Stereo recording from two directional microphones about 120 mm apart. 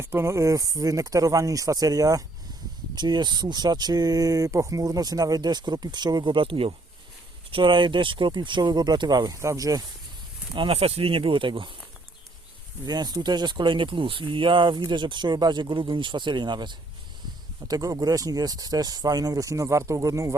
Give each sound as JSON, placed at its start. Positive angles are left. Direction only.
{"t": 0.0, "sound": "speech", "side_deg": -20}
{"t": 10.5, "sound": "speech", "side_deg": -50}
{"t": 12.8, "sound": "speech", "side_deg": -35}